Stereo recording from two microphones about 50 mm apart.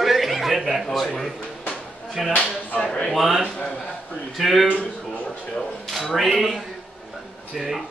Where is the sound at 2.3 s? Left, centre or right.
Left.